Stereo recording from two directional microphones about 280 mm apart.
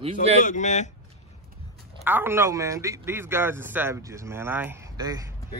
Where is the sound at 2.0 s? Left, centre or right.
Centre.